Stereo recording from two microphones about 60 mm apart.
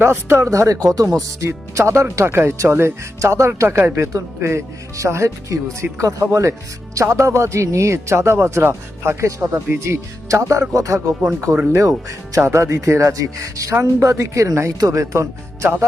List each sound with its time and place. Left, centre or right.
0.0 s speech: right
1.5 s speech: right
2.1 s speech: right
3.2 s speech: right
3.8 s speech: right
9.4 s speech: right
9.8 s speech: right
11.5 s speech: right
12.4 s speech: right